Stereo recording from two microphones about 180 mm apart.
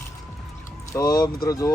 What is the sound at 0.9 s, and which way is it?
Speech, 20° left (ahead or behind).